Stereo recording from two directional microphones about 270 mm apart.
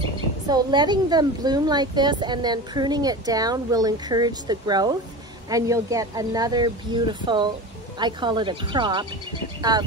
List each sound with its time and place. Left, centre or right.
0.5 s a woman's voice: centre